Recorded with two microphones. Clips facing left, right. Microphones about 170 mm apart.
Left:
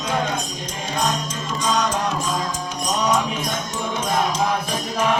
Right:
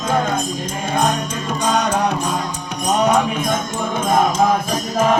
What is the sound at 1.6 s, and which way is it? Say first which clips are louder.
Music: right 4 dB; 60° right (ahead or behind).